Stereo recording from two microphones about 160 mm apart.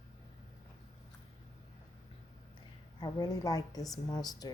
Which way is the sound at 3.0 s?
25° left (ahead or behind).